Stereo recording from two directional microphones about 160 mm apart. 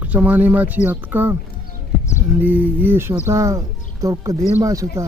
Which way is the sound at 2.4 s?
10° right (ahead or behind).